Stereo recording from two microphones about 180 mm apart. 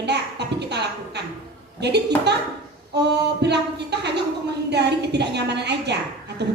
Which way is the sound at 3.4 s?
70° right (ahead or behind).